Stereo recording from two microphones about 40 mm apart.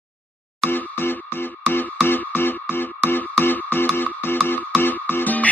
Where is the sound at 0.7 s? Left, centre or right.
Left.